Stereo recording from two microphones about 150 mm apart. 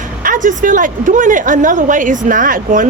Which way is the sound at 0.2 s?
65° right (ahead or behind).